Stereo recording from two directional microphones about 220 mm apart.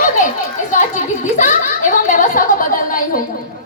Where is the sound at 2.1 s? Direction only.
35° left (ahead or behind).